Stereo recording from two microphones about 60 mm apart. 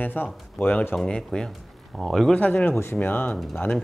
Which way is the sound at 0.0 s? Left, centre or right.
Left.